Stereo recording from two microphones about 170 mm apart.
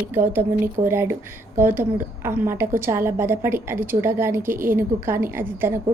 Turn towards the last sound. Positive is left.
turn(degrees=-10)  # may be behind; listen again after turning